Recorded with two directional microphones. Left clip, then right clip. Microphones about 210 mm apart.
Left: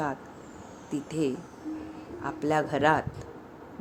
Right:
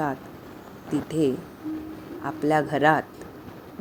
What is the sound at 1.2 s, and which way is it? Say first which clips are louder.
A woman's voice: right 5 dB; 20° right (ahead or behind).